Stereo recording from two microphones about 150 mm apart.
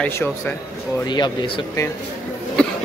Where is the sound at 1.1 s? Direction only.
30° left (ahead or behind).